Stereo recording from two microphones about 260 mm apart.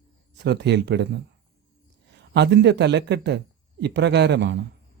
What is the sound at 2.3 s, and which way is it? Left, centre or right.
A man's voice, right.